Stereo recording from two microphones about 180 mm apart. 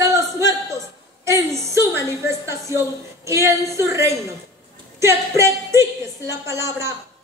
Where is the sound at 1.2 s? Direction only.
15° right (ahead or behind).